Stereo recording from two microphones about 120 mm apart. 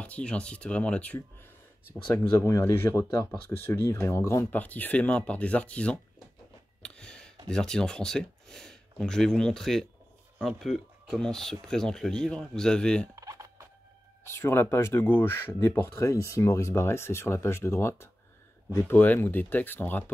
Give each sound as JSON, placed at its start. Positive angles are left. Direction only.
{"t": 0.0, "sound": "speech", "side_deg": 10}
{"t": 2.1, "sound": "speech", "side_deg": 25}
{"t": 6.8, "sound": "a sound", "side_deg": 5}
{"t": 7.4, "sound": "speech", "side_deg": 5}
{"t": 13.1, "sound": "a sound", "side_deg": -25}
{"t": 14.2, "sound": "speech", "side_deg": 20}